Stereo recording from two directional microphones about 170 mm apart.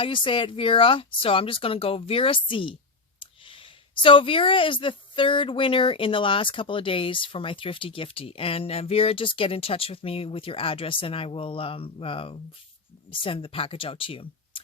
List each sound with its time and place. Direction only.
0.0 s speech: 30° left (ahead or behind)